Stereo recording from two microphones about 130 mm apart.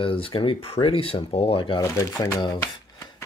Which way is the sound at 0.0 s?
45° left (ahead or behind).